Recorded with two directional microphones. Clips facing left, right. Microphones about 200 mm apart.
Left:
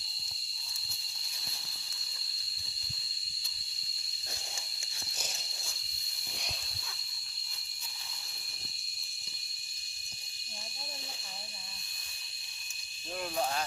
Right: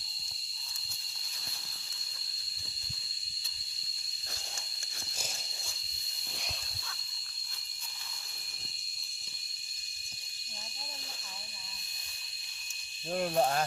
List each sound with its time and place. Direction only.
13.1 s speech: 45° right (ahead or behind)